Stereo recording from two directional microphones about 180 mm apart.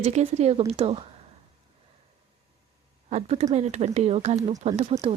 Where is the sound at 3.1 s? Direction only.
40° right (ahead or behind).